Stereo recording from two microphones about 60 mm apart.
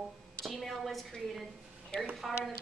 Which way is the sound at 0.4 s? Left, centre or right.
Centre.